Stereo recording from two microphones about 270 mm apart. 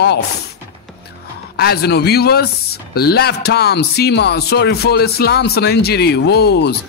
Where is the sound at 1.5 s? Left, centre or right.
Left.